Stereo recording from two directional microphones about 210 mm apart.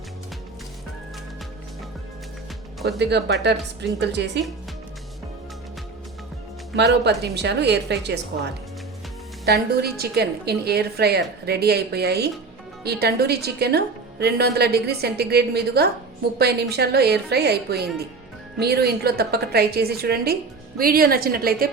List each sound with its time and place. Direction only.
3.0 s a woman's voice: 55° right (ahead or behind)
6.7 s a woman's voice: 55° right (ahead or behind)
9.5 s a woman's voice: 50° right (ahead or behind)